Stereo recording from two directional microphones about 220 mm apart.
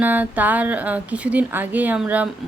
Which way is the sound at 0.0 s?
5° right (ahead or behind).